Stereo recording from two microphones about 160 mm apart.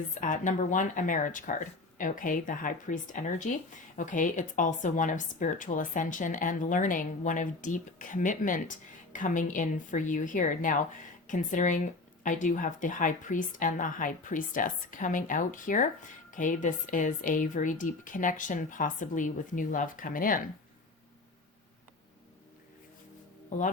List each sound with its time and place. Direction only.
0.1 s a woman's voice: 50° left (ahead or behind)